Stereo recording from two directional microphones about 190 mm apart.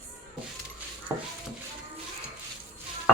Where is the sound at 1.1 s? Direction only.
15° right (ahead or behind).